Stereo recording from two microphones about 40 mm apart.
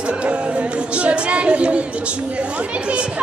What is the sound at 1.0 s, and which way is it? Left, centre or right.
Speech, right.